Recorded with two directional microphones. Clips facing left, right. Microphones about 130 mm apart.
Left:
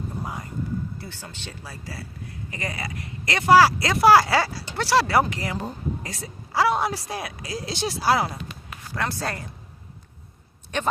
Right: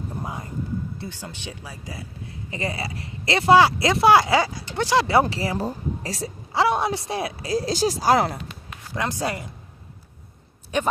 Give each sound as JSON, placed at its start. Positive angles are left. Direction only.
{"t": 0.9, "sound": "a woman's voice", "side_deg": -15}
{"t": 6.5, "sound": "a woman's voice", "side_deg": -25}
{"t": 9.0, "sound": "speech", "side_deg": -15}